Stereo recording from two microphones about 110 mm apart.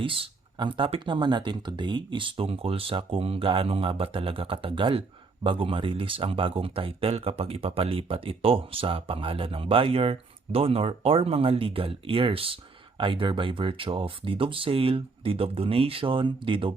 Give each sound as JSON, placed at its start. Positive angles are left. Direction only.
{"t": 0.0, "sound": "speech", "side_deg": -55}